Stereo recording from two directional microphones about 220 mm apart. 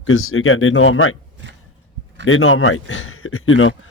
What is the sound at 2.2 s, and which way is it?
Speech, 65° left (ahead or behind).